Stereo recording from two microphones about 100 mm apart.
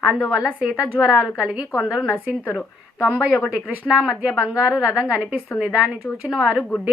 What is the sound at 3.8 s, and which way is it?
A woman's voice, 5° right (ahead or behind).